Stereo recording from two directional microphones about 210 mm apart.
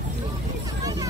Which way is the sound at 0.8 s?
15° right (ahead or behind).